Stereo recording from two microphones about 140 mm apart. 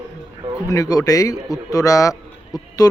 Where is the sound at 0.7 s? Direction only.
25° left (ahead or behind).